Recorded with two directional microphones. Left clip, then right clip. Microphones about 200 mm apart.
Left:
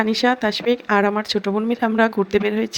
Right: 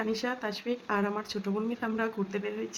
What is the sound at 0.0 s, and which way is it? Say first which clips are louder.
Speech: left 13 dB; 35° left (ahead or behind).